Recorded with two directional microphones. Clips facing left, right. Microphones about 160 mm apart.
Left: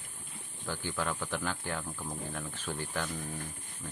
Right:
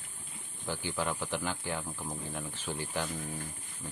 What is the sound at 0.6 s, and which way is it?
Speech, 15° right (ahead or behind).